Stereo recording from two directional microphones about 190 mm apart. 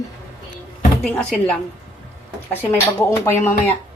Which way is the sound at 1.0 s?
5° left (ahead or behind).